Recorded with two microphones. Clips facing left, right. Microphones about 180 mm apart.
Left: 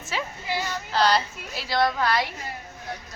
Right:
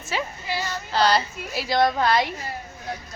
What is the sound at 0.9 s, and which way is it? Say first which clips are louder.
Speech: right 1 dB; centre (ahead or behind).